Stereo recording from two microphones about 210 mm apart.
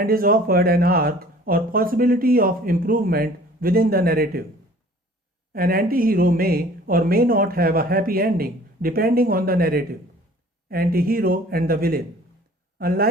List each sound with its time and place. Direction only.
0.0 s speech: 45° right (ahead or behind)
5.5 s speech: 45° right (ahead or behind)